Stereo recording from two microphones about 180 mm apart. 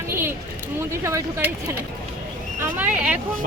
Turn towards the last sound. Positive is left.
turn(degrees=-5)  # may be behind; listen again after turning